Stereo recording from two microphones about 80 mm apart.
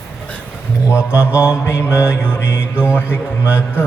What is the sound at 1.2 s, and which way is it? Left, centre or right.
Mantra, centre.